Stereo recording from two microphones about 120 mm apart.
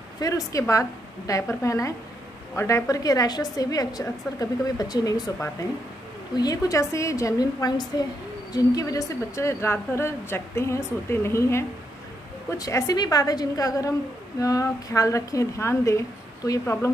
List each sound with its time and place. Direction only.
0.2 s a woman's voice: 30° left (ahead or behind)
6.3 s a woman's voice: 30° left (ahead or behind)